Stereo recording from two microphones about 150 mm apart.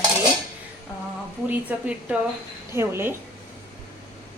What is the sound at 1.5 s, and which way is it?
A woman's voice, 10° right (ahead or behind).